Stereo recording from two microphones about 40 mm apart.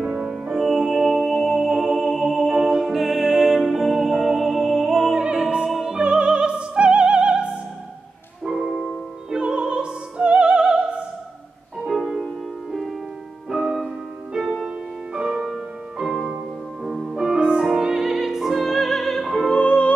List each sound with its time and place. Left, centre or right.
0.3 s music: centre
2.4 s music: right
2.7 s music: centre
5.1 s opera: centre
5.7 s music: centre
5.9 s music: right
8.5 s music: centre
9.4 s music: right
11.8 s music: centre
13.5 s music: centre
19.4 s music: left